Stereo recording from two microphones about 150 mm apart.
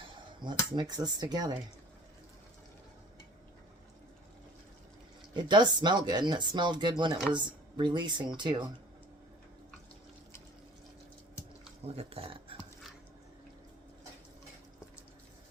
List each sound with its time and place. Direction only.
0.4 s speech: 30° right (ahead or behind)
5.3 s speech: 30° right (ahead or behind)
11.9 s speech: 40° right (ahead or behind)